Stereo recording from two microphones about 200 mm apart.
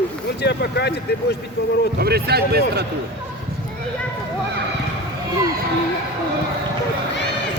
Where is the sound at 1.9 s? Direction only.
50° right (ahead or behind).